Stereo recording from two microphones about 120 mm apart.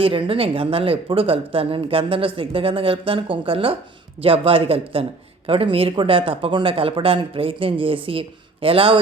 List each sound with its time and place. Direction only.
0.0 s speech: 50° right (ahead or behind)